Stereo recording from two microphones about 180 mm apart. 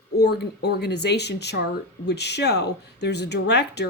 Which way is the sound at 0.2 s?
65° left (ahead or behind).